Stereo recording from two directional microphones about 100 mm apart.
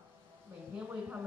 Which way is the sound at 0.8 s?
15° right (ahead or behind).